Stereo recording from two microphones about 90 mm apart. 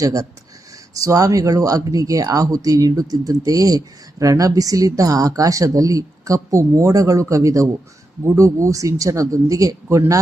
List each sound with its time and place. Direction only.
0.0 s a woman's voice: 40° right (ahead or behind)